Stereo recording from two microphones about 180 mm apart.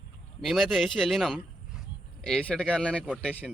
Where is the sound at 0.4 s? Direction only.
Centre (ahead or behind).